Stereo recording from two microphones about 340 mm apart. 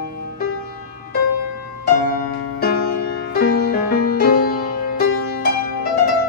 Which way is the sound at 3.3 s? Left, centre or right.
Left.